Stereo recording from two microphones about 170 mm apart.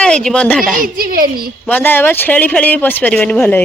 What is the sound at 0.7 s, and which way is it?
Speech, 55° right (ahead or behind).